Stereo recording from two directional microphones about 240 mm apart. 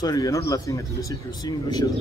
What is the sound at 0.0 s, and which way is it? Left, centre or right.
Speech, centre.